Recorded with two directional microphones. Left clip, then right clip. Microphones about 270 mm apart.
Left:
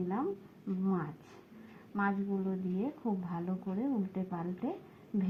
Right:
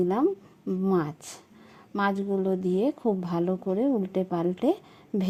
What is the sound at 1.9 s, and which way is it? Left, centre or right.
A woman's voice, right.